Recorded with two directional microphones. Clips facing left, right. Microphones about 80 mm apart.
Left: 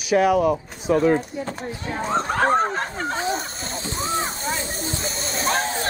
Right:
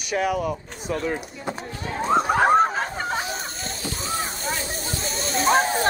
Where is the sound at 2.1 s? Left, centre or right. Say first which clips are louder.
Right 2 dB; centre.